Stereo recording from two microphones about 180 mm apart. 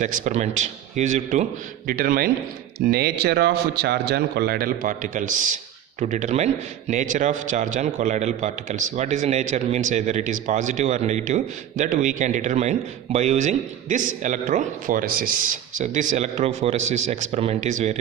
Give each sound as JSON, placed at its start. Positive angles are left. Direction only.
{"t": 0.0, "sound": "a man's voice", "side_deg": -40}
{"t": 1.9, "sound": "a man's voice", "side_deg": -55}